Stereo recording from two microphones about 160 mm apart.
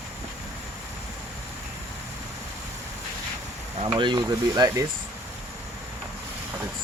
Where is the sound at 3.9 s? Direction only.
30° right (ahead or behind).